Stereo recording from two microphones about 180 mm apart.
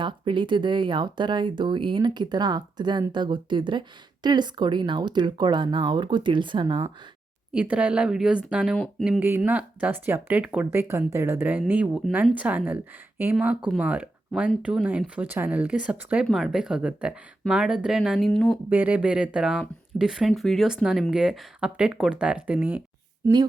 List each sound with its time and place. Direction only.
0.0 s speech: 25° right (ahead or behind)
7.5 s speech: 5° right (ahead or behind)
9.2 s speech: 10° right (ahead or behind)
18.7 s speech: 10° right (ahead or behind)